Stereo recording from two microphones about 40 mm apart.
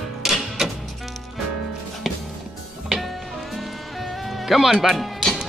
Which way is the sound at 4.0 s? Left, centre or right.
Centre.